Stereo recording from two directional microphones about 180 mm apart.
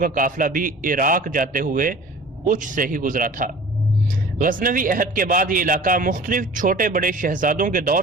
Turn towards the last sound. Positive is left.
turn(degrees=-50)  # may be behind; listen again after turning